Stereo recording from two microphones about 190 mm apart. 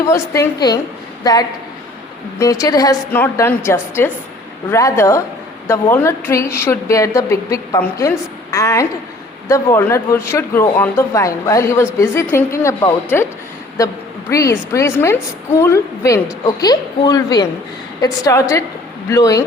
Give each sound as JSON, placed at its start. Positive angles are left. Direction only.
{"t": 0.1, "sound": "a woman's voice", "side_deg": 15}